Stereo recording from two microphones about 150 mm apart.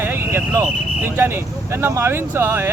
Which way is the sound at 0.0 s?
15° right (ahead or behind).